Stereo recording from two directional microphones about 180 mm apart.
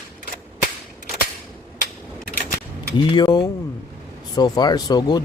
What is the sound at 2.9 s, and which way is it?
A man's voice, 25° left (ahead or behind).